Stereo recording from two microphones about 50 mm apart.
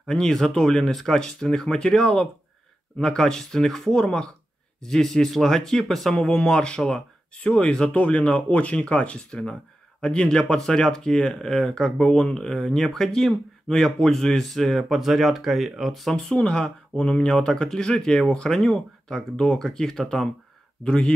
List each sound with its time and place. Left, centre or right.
0.0 s speech: centre
16.3 s speech: centre